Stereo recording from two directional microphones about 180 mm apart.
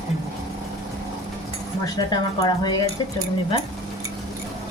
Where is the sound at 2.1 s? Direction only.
25° left (ahead or behind).